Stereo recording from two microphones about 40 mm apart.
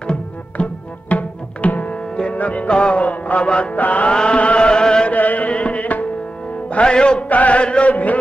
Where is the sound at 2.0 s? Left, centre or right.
Left.